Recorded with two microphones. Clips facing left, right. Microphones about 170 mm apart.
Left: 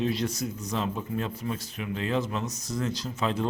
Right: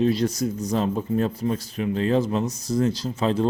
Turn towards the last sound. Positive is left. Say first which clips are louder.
# right 6 dB
turn(degrees=-35)  # may be behind; listen again after turning